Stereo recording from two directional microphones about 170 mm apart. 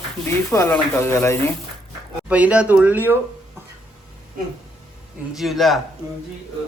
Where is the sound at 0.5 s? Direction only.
15° left (ahead or behind).